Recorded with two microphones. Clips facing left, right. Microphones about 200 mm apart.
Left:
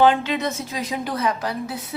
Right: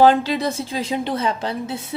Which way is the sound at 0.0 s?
35° right (ahead or behind).